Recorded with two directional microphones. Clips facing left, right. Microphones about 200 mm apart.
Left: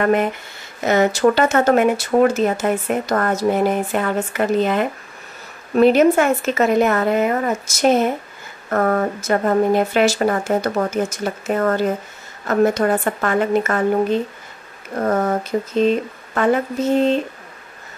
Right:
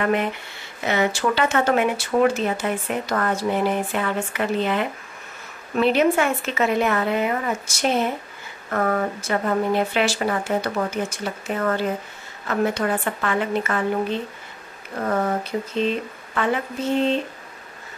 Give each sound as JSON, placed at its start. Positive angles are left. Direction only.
{"t": 0.0, "sound": "speech", "side_deg": 45}
{"t": 15.0, "sound": "speech", "side_deg": 45}